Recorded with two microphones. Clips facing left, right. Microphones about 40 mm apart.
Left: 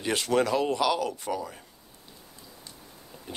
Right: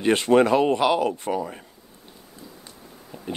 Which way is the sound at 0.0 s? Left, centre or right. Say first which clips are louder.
Right 8 dB; right.